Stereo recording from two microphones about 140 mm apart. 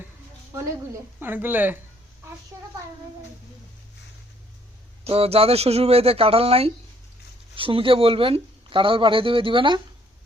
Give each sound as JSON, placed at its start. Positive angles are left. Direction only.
{"t": 1.2, "sound": "speech", "side_deg": -15}
{"t": 5.0, "sound": "speech", "side_deg": -45}